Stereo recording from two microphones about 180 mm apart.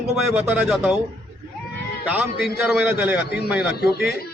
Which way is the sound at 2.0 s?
5° right (ahead or behind).